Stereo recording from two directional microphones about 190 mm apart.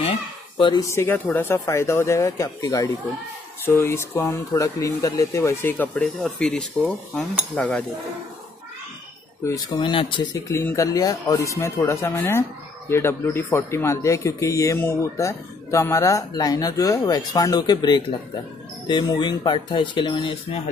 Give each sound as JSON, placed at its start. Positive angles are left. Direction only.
{"t": 0.6, "sound": "speech", "side_deg": 20}
{"t": 9.4, "sound": "speech", "side_deg": 20}